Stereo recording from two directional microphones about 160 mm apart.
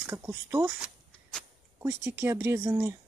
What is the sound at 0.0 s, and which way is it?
Speech, 20° right (ahead or behind).